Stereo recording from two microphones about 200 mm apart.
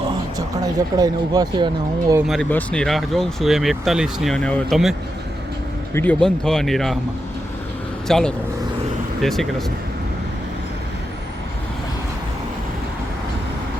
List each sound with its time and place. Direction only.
0.3 s speech: 20° right (ahead or behind)
2.2 s speech: centre (ahead or behind)
8.0 s speech: centre (ahead or behind)